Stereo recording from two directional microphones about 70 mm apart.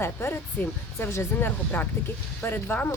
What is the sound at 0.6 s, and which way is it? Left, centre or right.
Speech, left.